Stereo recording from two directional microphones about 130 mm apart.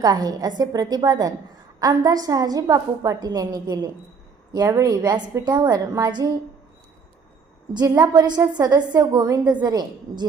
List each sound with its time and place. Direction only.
0.0 s a woman's voice: 30° right (ahead or behind)
7.7 s a woman's voice: 30° right (ahead or behind)